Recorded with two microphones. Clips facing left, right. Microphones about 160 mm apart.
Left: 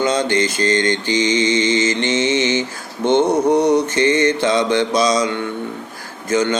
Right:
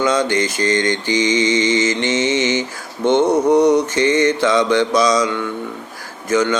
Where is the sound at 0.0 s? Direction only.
25° left (ahead or behind).